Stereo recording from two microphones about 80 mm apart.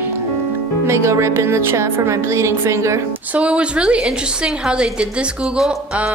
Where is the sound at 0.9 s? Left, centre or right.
Right.